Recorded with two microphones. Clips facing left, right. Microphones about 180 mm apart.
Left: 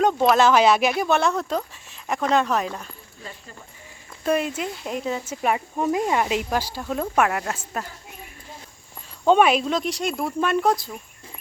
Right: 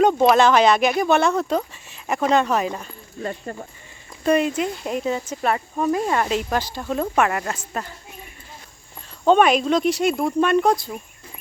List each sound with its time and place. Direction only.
0.0 s speech: centre (ahead or behind)
3.2 s speech: 55° right (ahead or behind)
4.3 s speech: 5° left (ahead or behind)
9.2 s speech: 5° left (ahead or behind)